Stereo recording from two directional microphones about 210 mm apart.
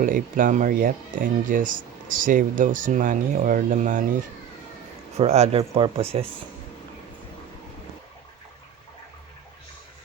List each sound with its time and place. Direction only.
0.0 s speech: 40° right (ahead or behind)
5.1 s speech: 30° right (ahead or behind)